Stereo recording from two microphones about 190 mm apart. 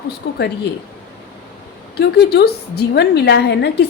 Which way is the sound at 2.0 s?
60° left (ahead or behind).